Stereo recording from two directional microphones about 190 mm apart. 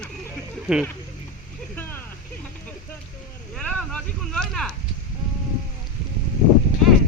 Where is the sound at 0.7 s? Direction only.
5° right (ahead or behind).